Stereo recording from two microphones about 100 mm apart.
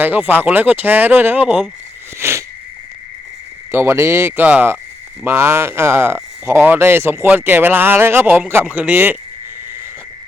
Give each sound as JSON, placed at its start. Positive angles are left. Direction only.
{"t": 0.0, "sound": "speech", "side_deg": -20}
{"t": 2.1, "sound": "a sound", "side_deg": -25}
{"t": 3.7, "sound": "speech", "side_deg": -25}